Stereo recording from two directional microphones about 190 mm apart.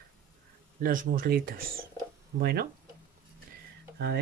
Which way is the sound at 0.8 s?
45° right (ahead or behind).